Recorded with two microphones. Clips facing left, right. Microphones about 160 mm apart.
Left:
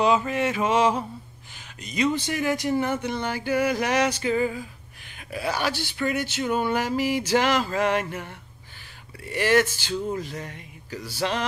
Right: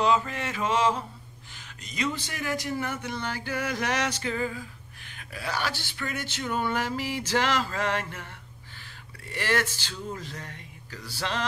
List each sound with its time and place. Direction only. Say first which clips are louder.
0.0 s speech: left 4 dB; 15° left (ahead or behind)
9.3 s speech: left 7 dB; 15° left (ahead or behind)